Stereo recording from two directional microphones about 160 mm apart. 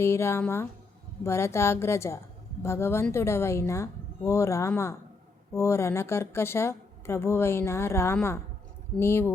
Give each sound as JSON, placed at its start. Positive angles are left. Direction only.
{"t": 0.0, "sound": "speech", "side_deg": 15}